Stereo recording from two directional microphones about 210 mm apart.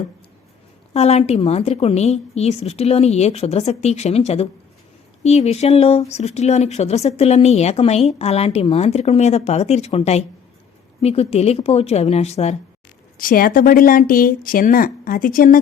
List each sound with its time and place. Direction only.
0.9 s a woman's voice: 30° left (ahead or behind)
13.1 s speech: 45° left (ahead or behind)